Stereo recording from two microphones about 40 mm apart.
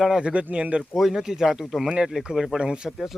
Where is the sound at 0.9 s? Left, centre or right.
Centre.